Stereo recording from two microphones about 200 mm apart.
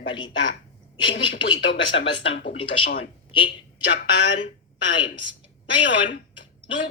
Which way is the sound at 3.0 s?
25° left (ahead or behind).